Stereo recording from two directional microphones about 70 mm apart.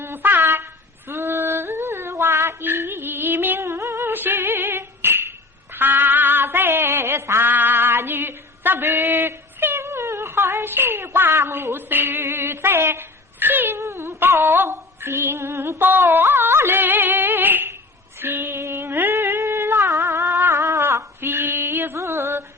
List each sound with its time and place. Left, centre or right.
0.0 s yodeling: right
5.7 s music: right
18.2 s a sound: right
21.9 s music: right